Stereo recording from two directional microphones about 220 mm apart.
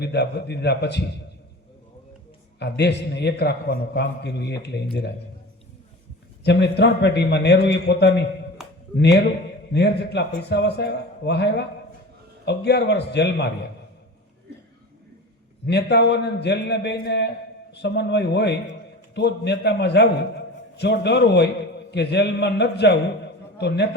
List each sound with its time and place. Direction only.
0.0 s a man's voice: 50° left (ahead or behind)
2.6 s a man's voice: 50° left (ahead or behind)
6.4 s a man's voice: 50° left (ahead or behind)
8.6 s a sound: centre (ahead or behind)
9.0 s a man's voice: 50° left (ahead or behind)
15.6 s a man's voice: 50° left (ahead or behind)